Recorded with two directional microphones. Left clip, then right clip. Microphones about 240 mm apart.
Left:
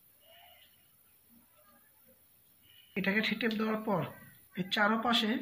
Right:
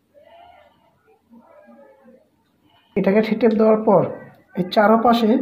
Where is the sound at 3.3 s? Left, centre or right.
Centre.